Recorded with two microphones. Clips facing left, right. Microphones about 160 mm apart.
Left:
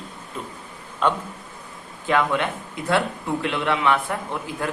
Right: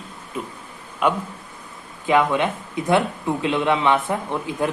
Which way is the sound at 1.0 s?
10° right (ahead or behind).